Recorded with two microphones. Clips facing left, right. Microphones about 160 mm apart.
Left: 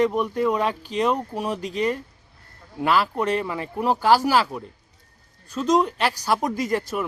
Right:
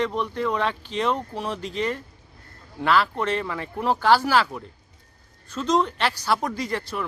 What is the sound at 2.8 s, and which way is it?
Speech, 10° left (ahead or behind).